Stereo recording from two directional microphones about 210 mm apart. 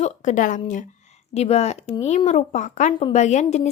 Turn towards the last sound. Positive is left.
turn(degrees=35)  # may be behind; listen again after turning